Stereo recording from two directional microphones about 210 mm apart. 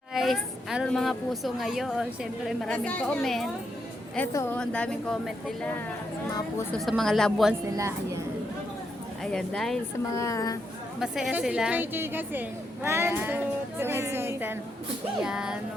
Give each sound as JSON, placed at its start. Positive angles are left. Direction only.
{"t": 0.1, "sound": "a woman's voice", "side_deg": 0}
{"t": 4.3, "sound": "a woman's voice", "side_deg": 10}
{"t": 7.8, "sound": "a woman's voice", "side_deg": -15}
{"t": 9.2, "sound": "a woman's voice", "side_deg": 0}
{"t": 10.2, "sound": "a woman's voice", "side_deg": 15}
{"t": 11.0, "sound": "a woman's voice", "side_deg": 0}